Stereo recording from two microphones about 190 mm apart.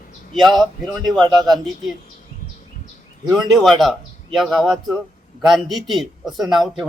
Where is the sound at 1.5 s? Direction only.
Centre (ahead or behind).